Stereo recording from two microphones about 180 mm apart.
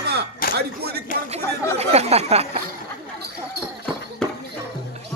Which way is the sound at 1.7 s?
35° right (ahead or behind).